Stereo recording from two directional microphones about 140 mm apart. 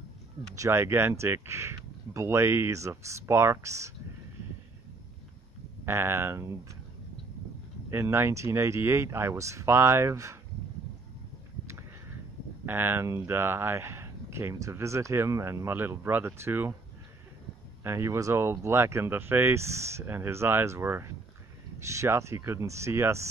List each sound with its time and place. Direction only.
0.6 s speech: 20° right (ahead or behind)
5.9 s speech: 20° right (ahead or behind)
7.9 s speech: 20° right (ahead or behind)
12.6 s speech: 15° right (ahead or behind)
17.8 s speech: 20° right (ahead or behind)